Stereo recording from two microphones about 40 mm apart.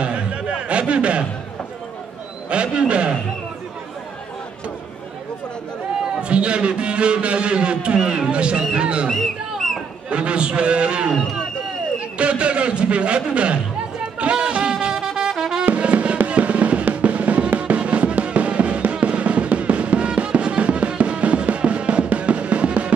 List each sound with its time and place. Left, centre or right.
0.0 s a sound: right
2.5 s a man's voice: right
6.2 s a man's voice: right
9.6 s a sound: centre
10.0 s a man's voice: right
12.2 s a man's voice: right
14.2 s music: right
15.6 s drum: right
17.6 s music: right